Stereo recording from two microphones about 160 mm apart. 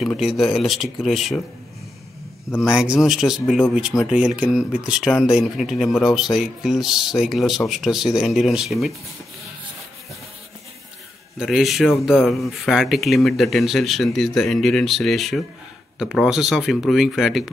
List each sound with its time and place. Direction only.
0.2 s speech: centre (ahead or behind)
2.6 s speech: 5° right (ahead or behind)
11.3 s speech: centre (ahead or behind)